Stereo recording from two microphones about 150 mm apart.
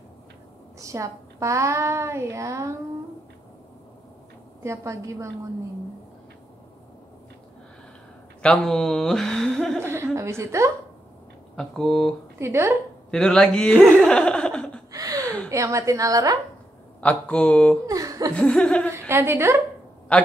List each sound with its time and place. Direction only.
0.7 s a child's voice: 20° right (ahead or behind)
4.6 s a child's voice: 20° right (ahead or behind)
8.4 s speech: 5° left (ahead or behind)
9.8 s a woman's voice: 15° right (ahead or behind)
11.5 s speech: centre (ahead or behind)
12.4 s a woman's voice: 20° right (ahead or behind)
13.1 s speech: 5° left (ahead or behind)
14.9 s a sound: 25° right (ahead or behind)
15.5 s a child's voice: 20° right (ahead or behind)
17.0 s speech: 10° left (ahead or behind)
17.8 s chuckle: 25° right (ahead or behind)
18.3 s speech: 5° left (ahead or behind)
18.9 s a woman's voice: 15° right (ahead or behind)
20.1 s speech: 10° left (ahead or behind)